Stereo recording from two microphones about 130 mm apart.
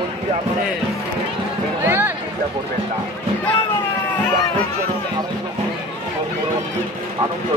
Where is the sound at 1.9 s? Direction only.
15° right (ahead or behind).